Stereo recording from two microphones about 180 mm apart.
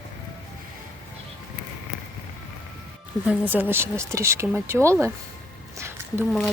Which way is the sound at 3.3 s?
10° right (ahead or behind).